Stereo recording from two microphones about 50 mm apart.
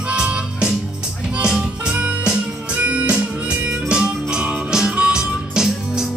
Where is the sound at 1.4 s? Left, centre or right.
Centre.